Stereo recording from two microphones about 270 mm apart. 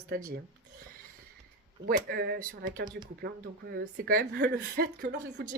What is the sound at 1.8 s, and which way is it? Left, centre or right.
Speech, right.